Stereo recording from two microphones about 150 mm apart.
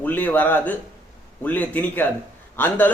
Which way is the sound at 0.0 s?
10° left (ahead or behind).